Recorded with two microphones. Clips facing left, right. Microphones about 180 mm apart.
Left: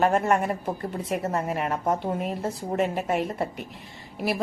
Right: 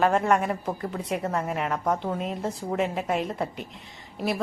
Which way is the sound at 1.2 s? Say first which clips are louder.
Left 1 dB; 25° left (ahead or behind).